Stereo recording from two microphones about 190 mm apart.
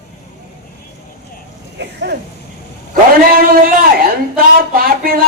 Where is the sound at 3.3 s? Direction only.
50° right (ahead or behind).